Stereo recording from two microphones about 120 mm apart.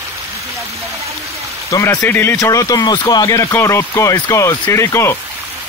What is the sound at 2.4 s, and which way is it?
Speech, 30° left (ahead or behind).